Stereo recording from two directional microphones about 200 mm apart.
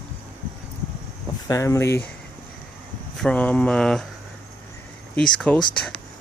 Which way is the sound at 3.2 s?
5° left (ahead or behind).